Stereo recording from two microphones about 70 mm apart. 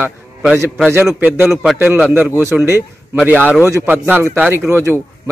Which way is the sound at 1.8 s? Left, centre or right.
Right.